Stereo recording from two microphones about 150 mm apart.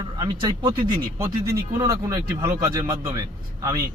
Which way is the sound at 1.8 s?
20° right (ahead or behind).